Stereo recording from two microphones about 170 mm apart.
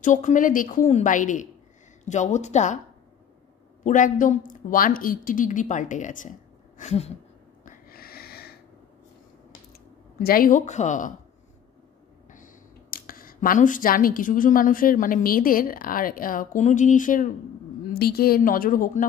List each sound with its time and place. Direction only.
0.0 s a woman's voice: 45° left (ahead or behind)
3.8 s a woman's voice: 50° left (ahead or behind)
6.8 s a sound: 40° left (ahead or behind)
7.6 s snort: 55° left (ahead or behind)
10.2 s a woman's voice: 55° left (ahead or behind)
12.9 s a woman's voice: 55° left (ahead or behind)
17.9 s a woman's voice: 65° left (ahead or behind)